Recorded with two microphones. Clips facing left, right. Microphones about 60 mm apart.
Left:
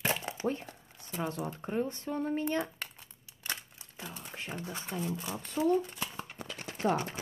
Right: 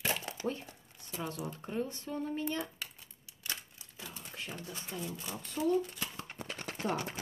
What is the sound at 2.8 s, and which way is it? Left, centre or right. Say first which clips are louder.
Crumpling: left 3 dB; left.